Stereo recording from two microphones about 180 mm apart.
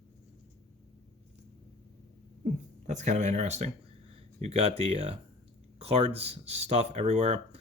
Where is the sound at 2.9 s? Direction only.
40° right (ahead or behind).